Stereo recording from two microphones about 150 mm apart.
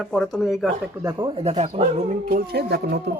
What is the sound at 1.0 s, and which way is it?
Speech, 25° right (ahead or behind).